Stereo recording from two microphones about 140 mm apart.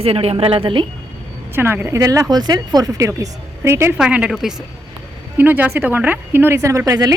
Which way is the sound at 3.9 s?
5° right (ahead or behind).